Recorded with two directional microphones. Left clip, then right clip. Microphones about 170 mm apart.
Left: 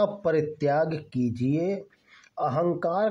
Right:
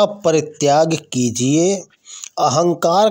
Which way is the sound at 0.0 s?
35° right (ahead or behind).